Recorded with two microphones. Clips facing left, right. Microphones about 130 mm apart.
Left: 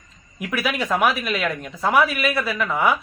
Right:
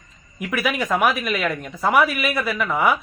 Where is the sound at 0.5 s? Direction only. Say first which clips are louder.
Right 1 dB; 5° right (ahead or behind).